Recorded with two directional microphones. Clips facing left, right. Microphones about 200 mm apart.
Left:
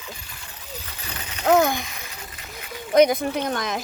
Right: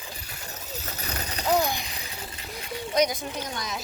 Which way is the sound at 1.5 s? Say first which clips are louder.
Left 6 dB; 50° left (ahead or behind).